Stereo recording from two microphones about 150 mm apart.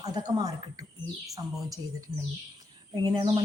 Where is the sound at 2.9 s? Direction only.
30° right (ahead or behind).